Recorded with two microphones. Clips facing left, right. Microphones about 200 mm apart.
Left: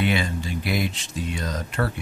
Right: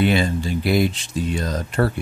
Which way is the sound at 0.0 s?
35° right (ahead or behind).